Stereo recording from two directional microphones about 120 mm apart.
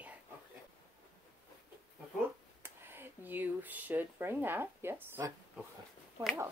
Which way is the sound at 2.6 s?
20° right (ahead or behind).